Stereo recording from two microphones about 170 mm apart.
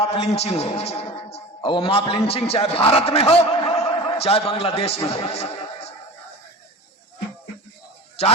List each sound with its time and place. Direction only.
0.0 s a man's voice: 35° left (ahead or behind)